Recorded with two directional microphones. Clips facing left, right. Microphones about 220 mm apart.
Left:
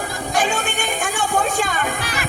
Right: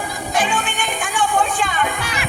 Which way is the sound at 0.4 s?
45° left (ahead or behind).